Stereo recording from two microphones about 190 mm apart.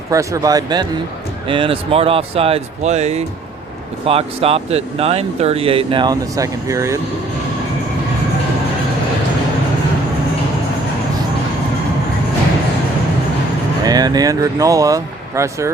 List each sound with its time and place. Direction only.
0.1 s speech: 15° right (ahead or behind)
13.8 s speech: 20° right (ahead or behind)